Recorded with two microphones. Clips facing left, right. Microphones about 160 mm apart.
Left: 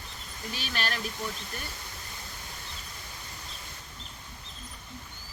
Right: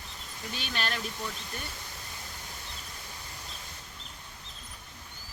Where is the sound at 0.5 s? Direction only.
5° left (ahead or behind).